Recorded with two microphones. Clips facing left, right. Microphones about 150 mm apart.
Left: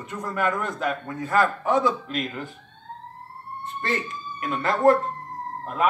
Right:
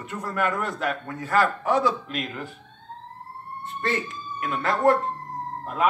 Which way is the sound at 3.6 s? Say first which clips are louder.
Right 1 dB; centre (ahead or behind).